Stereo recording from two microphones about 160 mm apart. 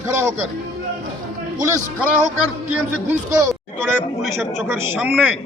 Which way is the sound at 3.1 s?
20° right (ahead or behind).